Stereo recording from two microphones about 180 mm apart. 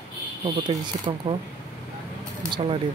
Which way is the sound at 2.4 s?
30° right (ahead or behind).